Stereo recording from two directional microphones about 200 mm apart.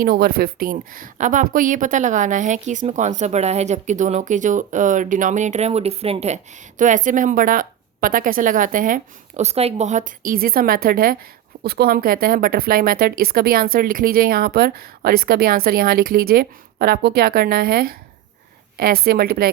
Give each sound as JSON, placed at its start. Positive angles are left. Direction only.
{"t": 0.0, "sound": "a woman's voice", "side_deg": -50}